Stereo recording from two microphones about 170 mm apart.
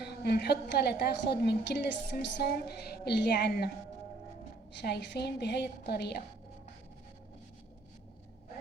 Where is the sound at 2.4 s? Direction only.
65° left (ahead or behind).